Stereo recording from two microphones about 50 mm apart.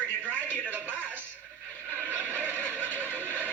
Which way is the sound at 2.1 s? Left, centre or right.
Right.